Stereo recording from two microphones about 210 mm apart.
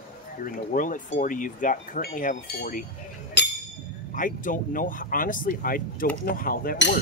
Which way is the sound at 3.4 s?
55° left (ahead or behind).